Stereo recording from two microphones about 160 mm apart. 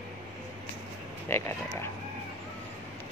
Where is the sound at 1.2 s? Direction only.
15° left (ahead or behind).